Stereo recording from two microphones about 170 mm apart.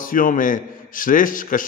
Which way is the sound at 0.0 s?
55° left (ahead or behind).